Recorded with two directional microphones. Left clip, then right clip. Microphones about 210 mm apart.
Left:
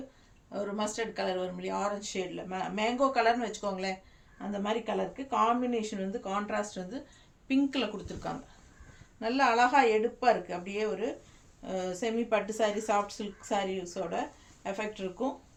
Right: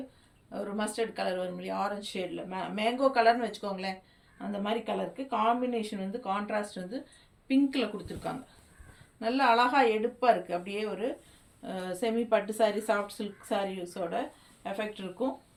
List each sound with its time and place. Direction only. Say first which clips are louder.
0.5 s speech: even; 15° left (ahead or behind)